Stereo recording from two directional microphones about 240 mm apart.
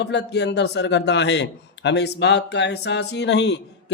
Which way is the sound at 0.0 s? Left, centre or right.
Left.